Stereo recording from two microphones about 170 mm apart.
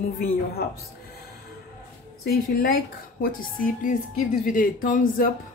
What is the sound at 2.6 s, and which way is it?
Speech, 60° left (ahead or behind).